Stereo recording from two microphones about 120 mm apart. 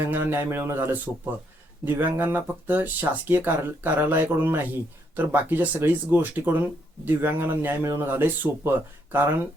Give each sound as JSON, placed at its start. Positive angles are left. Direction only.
{"t": 0.0, "sound": "speech", "side_deg": -15}